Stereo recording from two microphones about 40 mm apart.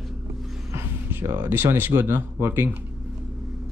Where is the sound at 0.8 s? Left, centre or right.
Right.